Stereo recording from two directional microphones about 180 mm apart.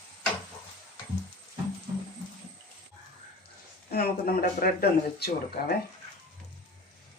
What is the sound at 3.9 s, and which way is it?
Speech, 55° left (ahead or behind).